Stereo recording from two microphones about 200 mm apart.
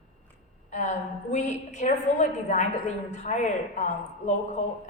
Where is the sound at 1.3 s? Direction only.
35° left (ahead or behind).